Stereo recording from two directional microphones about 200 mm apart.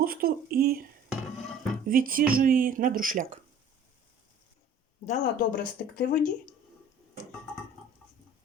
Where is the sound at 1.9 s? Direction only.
45° right (ahead or behind).